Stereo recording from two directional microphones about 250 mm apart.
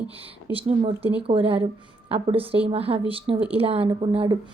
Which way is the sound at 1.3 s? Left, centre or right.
Right.